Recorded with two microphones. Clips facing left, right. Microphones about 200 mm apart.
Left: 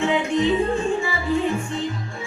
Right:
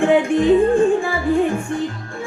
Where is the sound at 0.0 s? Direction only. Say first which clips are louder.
Right 5 dB; 55° right (ahead or behind).